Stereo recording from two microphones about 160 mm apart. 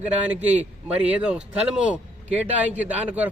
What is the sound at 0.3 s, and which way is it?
A man's voice, 10° right (ahead or behind).